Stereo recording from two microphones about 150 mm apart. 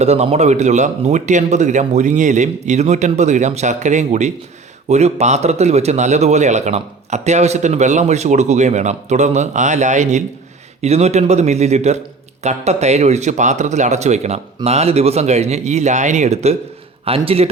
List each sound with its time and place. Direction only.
0.0 s a man's voice: 45° right (ahead or behind)